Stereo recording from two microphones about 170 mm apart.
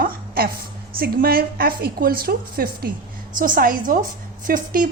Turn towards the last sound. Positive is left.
turn(degrees=-55)  # may be behind; listen again after turning